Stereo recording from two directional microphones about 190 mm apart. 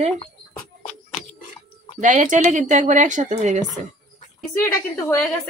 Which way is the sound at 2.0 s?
40° right (ahead or behind).